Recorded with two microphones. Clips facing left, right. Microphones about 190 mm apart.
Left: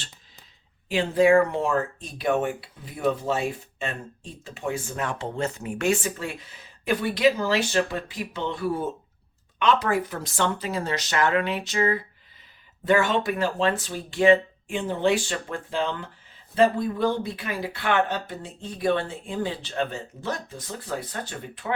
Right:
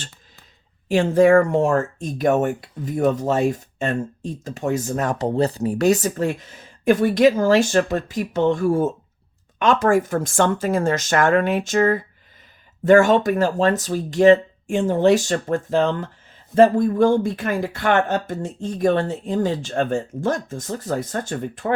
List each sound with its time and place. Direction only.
0.9 s speech: 45° right (ahead or behind)